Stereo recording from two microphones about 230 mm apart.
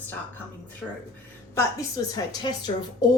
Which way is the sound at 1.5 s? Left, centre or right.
Centre.